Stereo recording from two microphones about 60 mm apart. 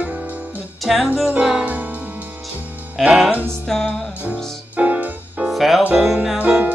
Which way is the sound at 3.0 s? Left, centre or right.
Centre.